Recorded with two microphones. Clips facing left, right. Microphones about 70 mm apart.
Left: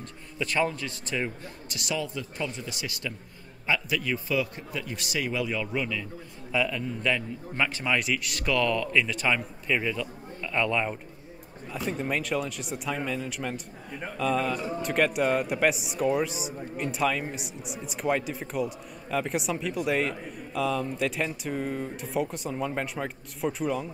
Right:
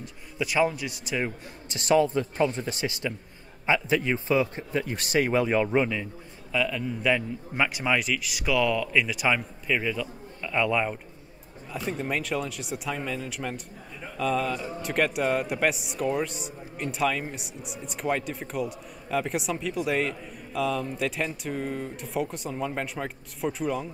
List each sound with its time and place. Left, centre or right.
0.0 s a man's voice: centre
1.7 s a man's voice: right
2.9 s a man's voice: right
6.5 s speech: centre
7.0 s a man's voice: centre
8.0 s speech: centre